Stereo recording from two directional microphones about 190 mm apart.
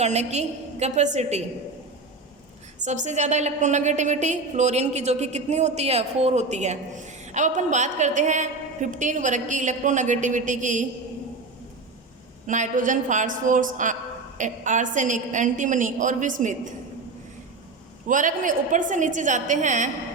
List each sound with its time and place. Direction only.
0.0 s a woman's voice: 35° right (ahead or behind)
2.8 s a woman's voice: 40° right (ahead or behind)
12.5 s a woman's voice: 40° right (ahead or behind)
18.1 s a woman's voice: 40° right (ahead or behind)